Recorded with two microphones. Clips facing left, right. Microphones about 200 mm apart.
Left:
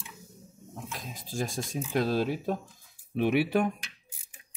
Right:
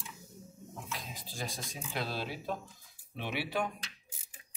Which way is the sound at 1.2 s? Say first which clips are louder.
Left 8 dB; 45° left (ahead or behind).